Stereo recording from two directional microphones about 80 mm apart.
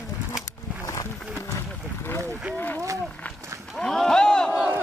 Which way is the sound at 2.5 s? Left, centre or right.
Left.